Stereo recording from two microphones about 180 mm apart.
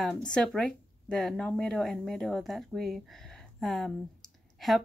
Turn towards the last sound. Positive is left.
turn(degrees=0)  # may be behind; listen again after turning